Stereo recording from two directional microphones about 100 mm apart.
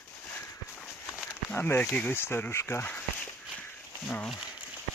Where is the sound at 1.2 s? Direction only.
25° left (ahead or behind).